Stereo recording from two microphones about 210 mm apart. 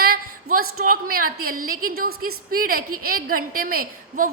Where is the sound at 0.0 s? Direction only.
45° right (ahead or behind).